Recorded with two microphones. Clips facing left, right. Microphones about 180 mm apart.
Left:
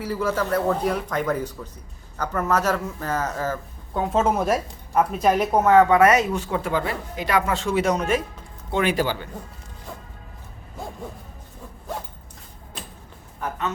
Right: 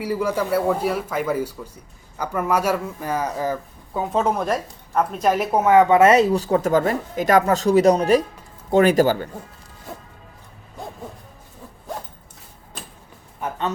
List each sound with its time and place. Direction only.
0.0 s speech: 15° right (ahead or behind)
3.9 s a woman's voice: centre (ahead or behind); by 9.2 s 45° right (ahead or behind)
13.4 s speech: 30° right (ahead or behind)